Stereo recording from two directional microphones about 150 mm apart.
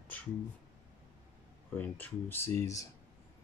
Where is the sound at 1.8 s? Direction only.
10° left (ahead or behind).